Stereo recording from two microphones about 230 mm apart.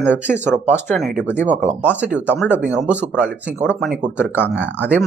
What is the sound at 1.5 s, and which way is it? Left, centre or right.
Speech, right.